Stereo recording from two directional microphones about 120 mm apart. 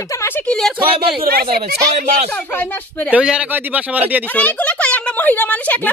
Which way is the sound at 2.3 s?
15° left (ahead or behind).